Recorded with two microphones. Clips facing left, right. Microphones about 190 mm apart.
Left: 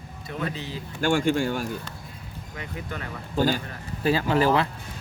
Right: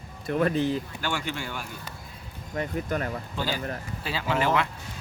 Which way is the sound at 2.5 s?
45° right (ahead or behind).